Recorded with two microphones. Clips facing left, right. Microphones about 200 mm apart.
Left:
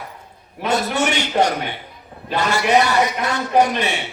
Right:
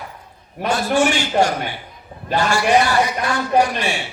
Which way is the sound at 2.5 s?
20° left (ahead or behind).